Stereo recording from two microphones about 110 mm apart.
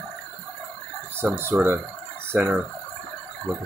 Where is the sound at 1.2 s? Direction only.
20° right (ahead or behind).